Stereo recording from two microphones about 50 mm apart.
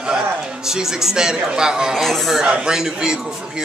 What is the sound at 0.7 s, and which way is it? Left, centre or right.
A man's voice, centre.